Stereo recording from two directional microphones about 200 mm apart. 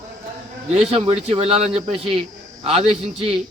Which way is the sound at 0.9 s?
30° right (ahead or behind).